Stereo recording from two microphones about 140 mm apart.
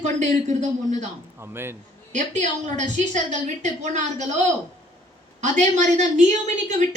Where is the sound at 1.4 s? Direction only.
15° right (ahead or behind).